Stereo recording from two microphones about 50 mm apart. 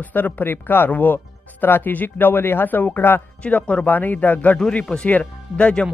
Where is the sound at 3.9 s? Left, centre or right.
Left.